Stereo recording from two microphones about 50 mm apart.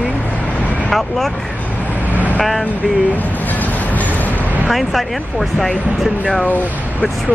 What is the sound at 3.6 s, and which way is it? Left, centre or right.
Train, left.